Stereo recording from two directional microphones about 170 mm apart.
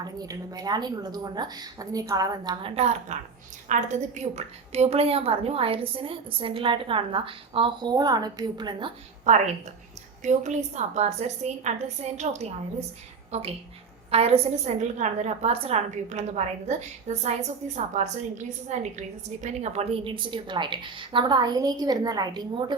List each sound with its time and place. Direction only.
0.0 s a woman's voice: 20° right (ahead or behind)
10.2 s a woman's voice: 45° right (ahead or behind); by 22.6 s 25° right (ahead or behind)